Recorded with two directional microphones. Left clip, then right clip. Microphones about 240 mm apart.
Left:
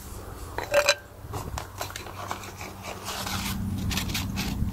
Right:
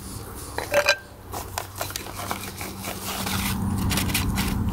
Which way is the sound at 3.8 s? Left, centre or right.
Centre.